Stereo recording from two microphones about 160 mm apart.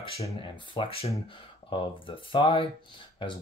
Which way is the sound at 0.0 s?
40° left (ahead or behind).